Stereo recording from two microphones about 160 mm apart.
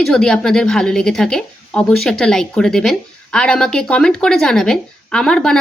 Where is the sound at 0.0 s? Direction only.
5° left (ahead or behind).